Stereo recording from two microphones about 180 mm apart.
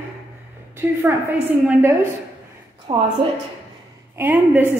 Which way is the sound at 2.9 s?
30° right (ahead or behind).